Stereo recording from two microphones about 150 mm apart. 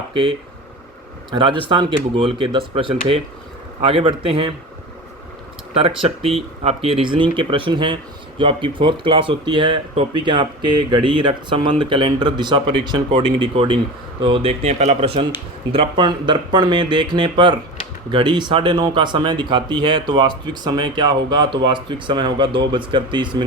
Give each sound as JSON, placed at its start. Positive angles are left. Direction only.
{"t": 0.1, "sound": "speech", "side_deg": -35}
{"t": 5.7, "sound": "speech", "side_deg": -40}